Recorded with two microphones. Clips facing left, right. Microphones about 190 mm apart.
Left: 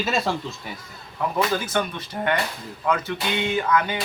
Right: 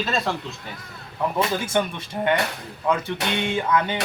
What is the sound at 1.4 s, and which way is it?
Speech, 25° right (ahead or behind).